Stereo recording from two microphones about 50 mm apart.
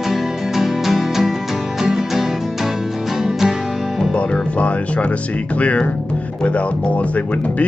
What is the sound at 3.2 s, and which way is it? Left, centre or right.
Music, centre.